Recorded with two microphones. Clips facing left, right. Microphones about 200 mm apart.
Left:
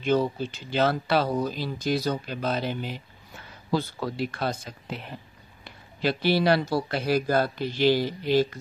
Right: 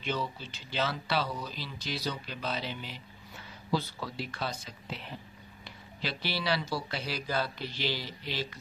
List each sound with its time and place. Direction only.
0.0 s speech: 50° left (ahead or behind)